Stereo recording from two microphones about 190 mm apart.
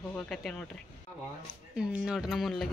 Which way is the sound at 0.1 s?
5° left (ahead or behind).